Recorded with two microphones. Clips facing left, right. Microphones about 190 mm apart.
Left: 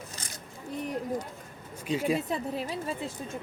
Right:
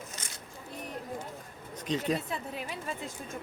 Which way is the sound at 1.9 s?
10° left (ahead or behind).